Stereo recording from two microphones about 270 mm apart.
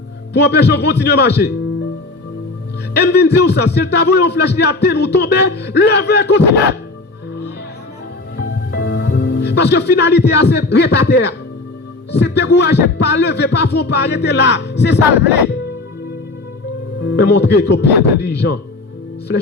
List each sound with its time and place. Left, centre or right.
0.3 s a man's voice: left
2.9 s a man's voice: left
8.7 s a man's voice: left
17.0 s a man's voice: left